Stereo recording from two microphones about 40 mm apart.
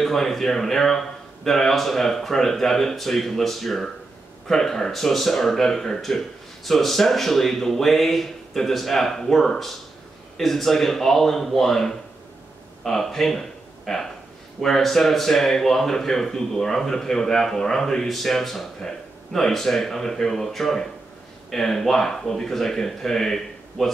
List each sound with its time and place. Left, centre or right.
0.0 s speech: centre